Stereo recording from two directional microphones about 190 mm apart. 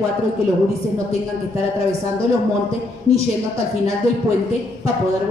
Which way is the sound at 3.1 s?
35° left (ahead or behind).